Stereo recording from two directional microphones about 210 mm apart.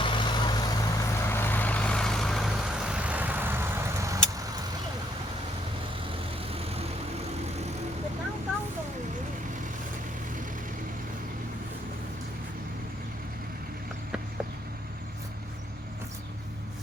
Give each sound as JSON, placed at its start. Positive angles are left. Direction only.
{"t": 0.0, "sound": "vehicle", "side_deg": 20}
{"t": 6.5, "sound": "vehicle", "side_deg": -30}